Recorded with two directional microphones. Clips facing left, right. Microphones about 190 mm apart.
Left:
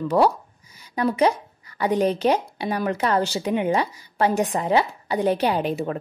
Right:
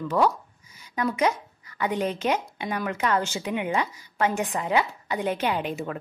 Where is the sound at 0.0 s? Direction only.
35° left (ahead or behind).